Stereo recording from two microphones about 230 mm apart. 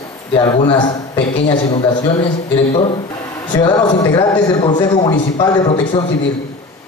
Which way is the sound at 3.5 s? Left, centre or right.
Centre.